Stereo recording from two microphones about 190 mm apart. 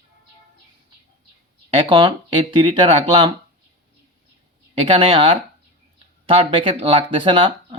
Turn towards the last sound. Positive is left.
turn(degrees=-25)  # may be behind; listen again after turning